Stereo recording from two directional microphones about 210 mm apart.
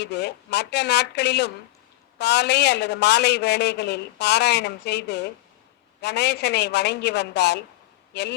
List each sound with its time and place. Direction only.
0.0 s a man's voice: 55° left (ahead or behind)